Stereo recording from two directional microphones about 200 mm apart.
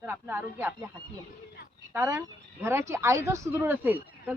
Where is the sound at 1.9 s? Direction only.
10° right (ahead or behind).